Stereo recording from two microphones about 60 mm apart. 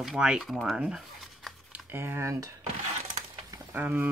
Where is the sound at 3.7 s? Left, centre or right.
Right.